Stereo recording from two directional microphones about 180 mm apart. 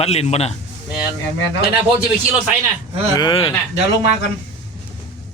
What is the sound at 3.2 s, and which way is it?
Speech, 25° left (ahead or behind).